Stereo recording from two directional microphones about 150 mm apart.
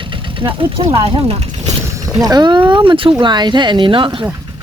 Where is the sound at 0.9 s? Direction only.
40° right (ahead or behind).